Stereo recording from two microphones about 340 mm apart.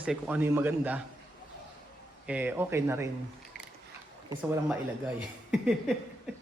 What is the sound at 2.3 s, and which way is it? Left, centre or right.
Speech, centre.